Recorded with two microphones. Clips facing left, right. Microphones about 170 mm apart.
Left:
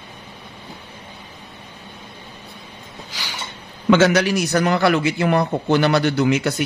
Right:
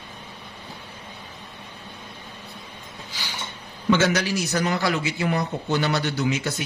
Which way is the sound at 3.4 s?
80° left.